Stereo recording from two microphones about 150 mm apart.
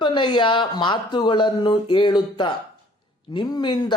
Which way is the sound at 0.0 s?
30° left (ahead or behind).